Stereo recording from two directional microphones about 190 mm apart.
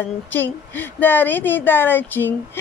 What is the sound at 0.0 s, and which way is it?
Speech, 10° left (ahead or behind).